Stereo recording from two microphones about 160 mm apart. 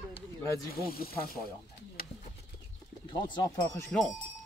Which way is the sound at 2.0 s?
70° left (ahead or behind).